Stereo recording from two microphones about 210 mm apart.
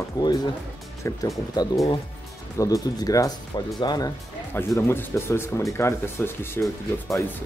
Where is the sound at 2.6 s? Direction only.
15° left (ahead or behind).